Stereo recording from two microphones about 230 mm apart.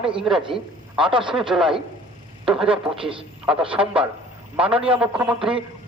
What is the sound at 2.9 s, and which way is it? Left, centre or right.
Speech, right.